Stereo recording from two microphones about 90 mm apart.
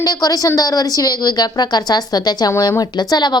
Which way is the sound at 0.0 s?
45° left (ahead or behind).